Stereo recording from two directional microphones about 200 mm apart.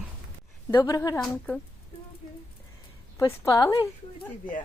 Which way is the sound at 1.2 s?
5° left (ahead or behind).